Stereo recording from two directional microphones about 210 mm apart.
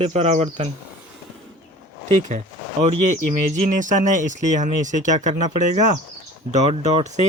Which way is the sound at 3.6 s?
35° right (ahead or behind).